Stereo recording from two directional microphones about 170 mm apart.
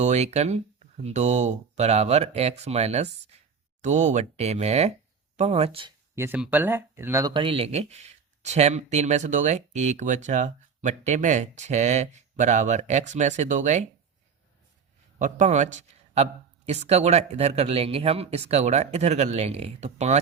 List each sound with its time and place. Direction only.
0.0 s speech: 40° right (ahead or behind)
6.1 s speech: 10° right (ahead or behind); by 13.8 s 45° right (ahead or behind)
15.2 s speech: 45° right (ahead or behind)